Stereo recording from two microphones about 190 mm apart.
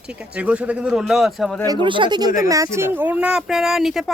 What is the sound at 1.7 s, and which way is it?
Speech, 25° right (ahead or behind).